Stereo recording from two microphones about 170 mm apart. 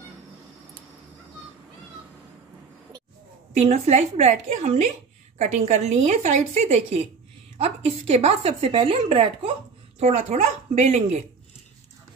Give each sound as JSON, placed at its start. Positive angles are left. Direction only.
{"t": 3.5, "sound": "speech", "side_deg": -40}